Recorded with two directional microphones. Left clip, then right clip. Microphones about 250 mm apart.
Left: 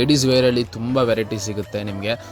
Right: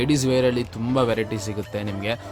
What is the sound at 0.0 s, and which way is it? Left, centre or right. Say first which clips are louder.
Speech: left 4 dB; centre.